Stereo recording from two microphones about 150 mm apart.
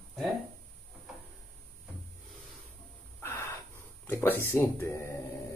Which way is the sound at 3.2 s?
15° left (ahead or behind).